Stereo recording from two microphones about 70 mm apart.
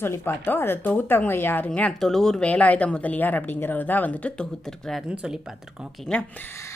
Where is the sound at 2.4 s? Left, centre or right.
Left.